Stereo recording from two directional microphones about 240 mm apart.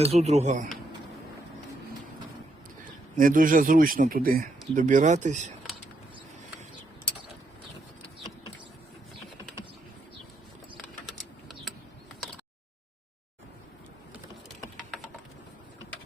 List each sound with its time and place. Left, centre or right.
0.0 s speech: right
3.2 s speech: right
11.0 s typing: centre